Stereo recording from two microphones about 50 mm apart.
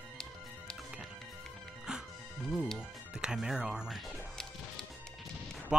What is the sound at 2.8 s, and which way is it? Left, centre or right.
Speech, centre.